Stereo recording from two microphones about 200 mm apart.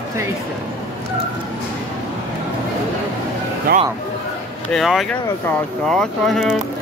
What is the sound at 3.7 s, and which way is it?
Speech, 50° right (ahead or behind).